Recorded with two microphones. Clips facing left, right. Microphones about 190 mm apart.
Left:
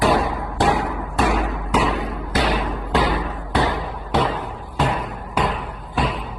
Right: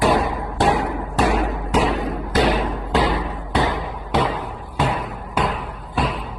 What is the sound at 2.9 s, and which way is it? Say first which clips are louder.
Bouncing: even; 20° right (ahead or behind).